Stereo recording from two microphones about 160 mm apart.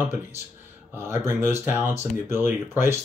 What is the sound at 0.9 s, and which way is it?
Speech, 15° right (ahead or behind).